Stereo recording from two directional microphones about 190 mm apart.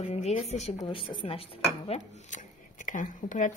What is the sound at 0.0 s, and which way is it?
Speech, 35° left (ahead or behind).